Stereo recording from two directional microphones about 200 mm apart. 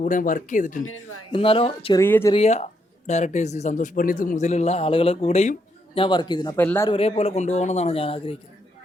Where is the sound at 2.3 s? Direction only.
35° left (ahead or behind).